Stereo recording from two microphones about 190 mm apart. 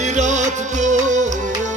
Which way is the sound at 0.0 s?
40° right (ahead or behind).